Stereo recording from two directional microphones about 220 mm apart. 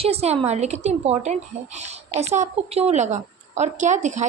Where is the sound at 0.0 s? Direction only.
30° right (ahead or behind).